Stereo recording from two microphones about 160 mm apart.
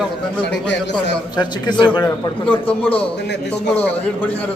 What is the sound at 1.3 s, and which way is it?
Speech, 25° left (ahead or behind).